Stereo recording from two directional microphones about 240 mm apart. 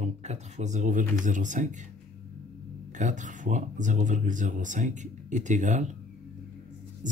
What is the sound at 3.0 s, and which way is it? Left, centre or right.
Speech, right.